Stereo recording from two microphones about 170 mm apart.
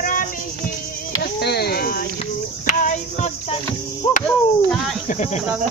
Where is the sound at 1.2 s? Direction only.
70° left (ahead or behind).